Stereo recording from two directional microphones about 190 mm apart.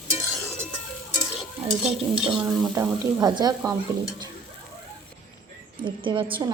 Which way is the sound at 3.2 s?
20° right (ahead or behind).